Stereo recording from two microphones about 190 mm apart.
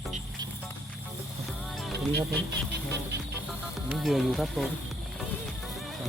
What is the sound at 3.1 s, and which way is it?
Music, 60° right (ahead or behind).